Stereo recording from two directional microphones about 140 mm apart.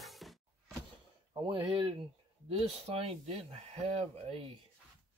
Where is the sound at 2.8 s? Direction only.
45° right (ahead or behind).